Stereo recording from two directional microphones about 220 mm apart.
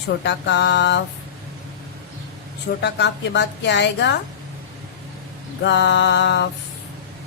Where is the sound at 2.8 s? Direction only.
50° left (ahead or behind).